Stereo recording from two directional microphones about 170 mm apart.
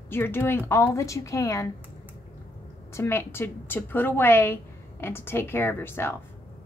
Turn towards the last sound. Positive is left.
turn(degrees=15)  # may be behind; listen again after turning